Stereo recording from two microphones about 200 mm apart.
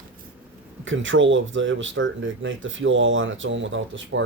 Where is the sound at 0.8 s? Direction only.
70° right (ahead or behind).